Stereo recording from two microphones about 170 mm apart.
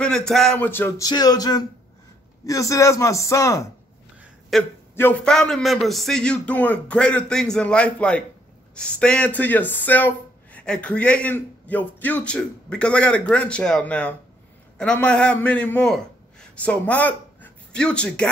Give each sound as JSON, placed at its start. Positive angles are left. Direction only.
{"t": 0.0, "sound": "a man's voice", "side_deg": 5}
{"t": 4.5, "sound": "a man's voice", "side_deg": 0}